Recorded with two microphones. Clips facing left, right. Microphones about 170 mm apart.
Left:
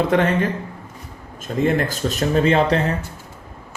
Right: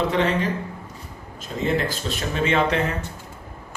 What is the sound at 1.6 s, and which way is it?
Speech, 40° left (ahead or behind).